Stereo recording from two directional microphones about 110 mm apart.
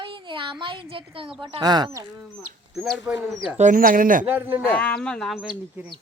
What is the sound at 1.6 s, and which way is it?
Speech, 40° right (ahead or behind).